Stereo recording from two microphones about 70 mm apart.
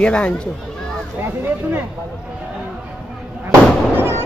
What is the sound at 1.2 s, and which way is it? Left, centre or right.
Speech, right.